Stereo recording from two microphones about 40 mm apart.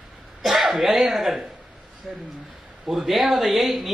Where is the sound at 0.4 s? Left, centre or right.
Centre.